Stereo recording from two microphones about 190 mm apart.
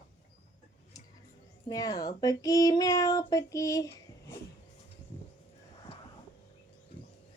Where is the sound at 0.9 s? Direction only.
20° left (ahead or behind).